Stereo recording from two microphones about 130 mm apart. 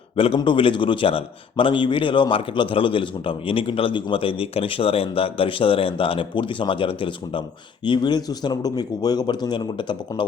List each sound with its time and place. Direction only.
0.3 s a man's voice: 40° left (ahead or behind)